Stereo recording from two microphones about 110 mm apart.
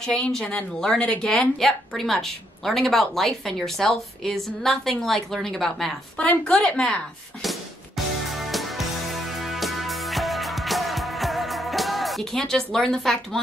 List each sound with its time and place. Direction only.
0.0 s speech: 5° left (ahead or behind)
7.4 s music: centre (ahead or behind)